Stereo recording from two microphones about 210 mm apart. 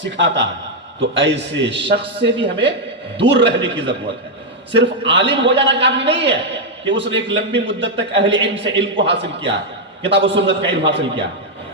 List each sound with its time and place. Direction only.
0.0 s a man's voice: 60° right (ahead or behind)